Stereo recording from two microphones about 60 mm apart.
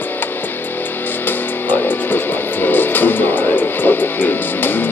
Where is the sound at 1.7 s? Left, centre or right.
Left.